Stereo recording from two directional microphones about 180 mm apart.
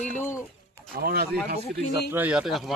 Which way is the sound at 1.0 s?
60° right (ahead or behind).